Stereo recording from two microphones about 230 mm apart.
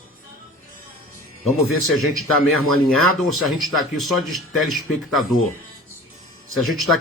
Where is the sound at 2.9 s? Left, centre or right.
Centre.